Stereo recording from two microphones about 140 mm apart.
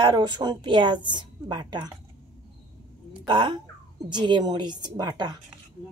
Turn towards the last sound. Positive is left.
turn(degrees=-30)  # may be behind; listen again after turning